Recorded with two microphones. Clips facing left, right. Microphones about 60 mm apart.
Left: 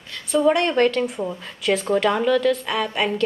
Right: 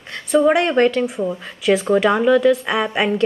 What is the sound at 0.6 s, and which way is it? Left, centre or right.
A woman's voice, centre.